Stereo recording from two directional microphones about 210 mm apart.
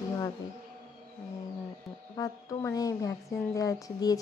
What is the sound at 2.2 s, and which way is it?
A woman's voice, 15° left (ahead or behind).